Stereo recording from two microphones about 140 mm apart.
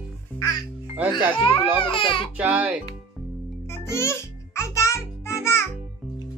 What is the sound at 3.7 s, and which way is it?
Music, 20° left (ahead or behind).